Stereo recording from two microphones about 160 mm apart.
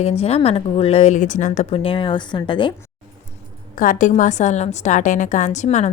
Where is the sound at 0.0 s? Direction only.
40° left (ahead or behind).